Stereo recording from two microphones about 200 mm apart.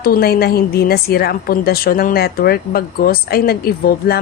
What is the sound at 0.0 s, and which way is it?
A woman's voice, 50° left (ahead or behind).